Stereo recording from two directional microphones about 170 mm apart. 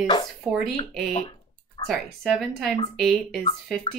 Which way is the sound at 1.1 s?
35° left (ahead or behind).